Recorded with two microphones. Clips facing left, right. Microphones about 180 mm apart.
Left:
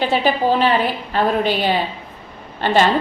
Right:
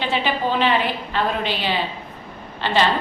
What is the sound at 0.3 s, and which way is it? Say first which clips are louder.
A woman's voice: left 4 dB; 40° left (ahead or behind).